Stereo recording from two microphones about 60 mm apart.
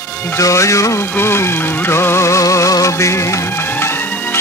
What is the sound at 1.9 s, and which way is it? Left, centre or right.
Music, left.